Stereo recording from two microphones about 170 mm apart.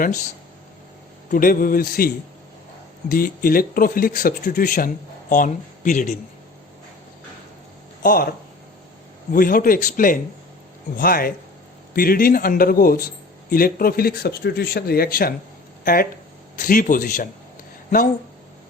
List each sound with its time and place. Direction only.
1.3 s speech: 55° left (ahead or behind)
8.0 s speech: 60° left (ahead or behind)
9.3 s a man's voice: 55° left (ahead or behind)